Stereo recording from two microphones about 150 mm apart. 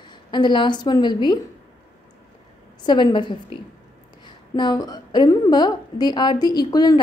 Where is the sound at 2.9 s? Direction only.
30° left (ahead or behind).